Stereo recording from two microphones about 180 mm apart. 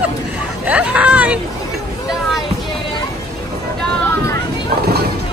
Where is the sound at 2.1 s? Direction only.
Centre (ahead or behind).